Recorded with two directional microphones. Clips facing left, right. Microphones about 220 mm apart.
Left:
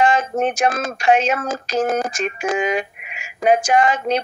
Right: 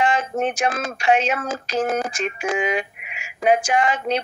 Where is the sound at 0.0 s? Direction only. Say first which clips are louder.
Left 3 dB; 40° left (ahead or behind).